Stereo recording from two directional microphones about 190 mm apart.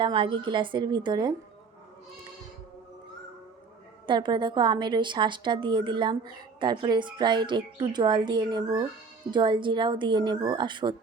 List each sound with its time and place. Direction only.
0.0 s a woman's voice: 25° right (ahead or behind)
4.0 s a woman's voice: 25° right (ahead or behind)